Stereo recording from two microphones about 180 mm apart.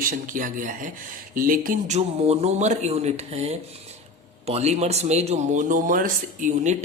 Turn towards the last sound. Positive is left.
turn(degrees=-45)  # may be behind; listen again after turning